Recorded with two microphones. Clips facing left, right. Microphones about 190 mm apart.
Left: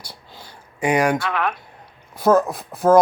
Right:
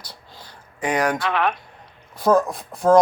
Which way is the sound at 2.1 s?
5° left (ahead or behind).